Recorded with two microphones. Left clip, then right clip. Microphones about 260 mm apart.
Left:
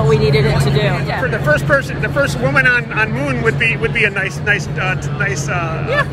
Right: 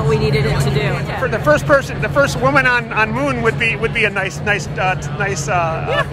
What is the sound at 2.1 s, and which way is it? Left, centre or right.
Speech, right.